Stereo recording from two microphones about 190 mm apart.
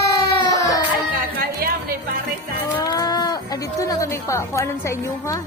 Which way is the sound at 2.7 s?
20° left (ahead or behind).